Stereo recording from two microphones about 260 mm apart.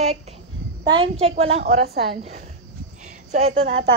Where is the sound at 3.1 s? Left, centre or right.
Right.